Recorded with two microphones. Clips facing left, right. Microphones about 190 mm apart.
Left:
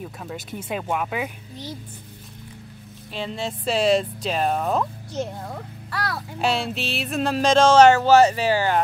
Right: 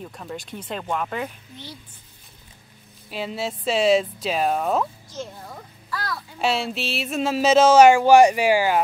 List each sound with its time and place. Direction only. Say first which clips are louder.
0.2 s speech: left 1 dB; 5° left (ahead or behind)
3.1 s speech: right 1 dB; 5° right (ahead or behind)
5.1 s a sound: left 6 dB; 60° left (ahead or behind)
6.4 s speech: even; centre (ahead or behind)